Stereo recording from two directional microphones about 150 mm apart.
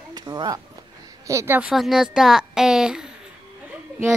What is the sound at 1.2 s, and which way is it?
Speech, 15° right (ahead or behind).